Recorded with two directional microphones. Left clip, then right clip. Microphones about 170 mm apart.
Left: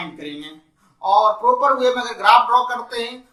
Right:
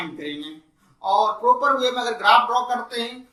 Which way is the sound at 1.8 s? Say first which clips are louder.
Left 3 dB; 20° left (ahead or behind).